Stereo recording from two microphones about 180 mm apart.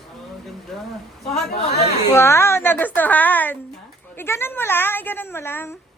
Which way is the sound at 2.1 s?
15° left (ahead or behind).